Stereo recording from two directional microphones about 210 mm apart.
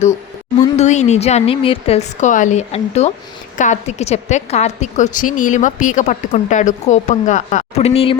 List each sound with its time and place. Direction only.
0.8 s a woman's voice: 35° left (ahead or behind)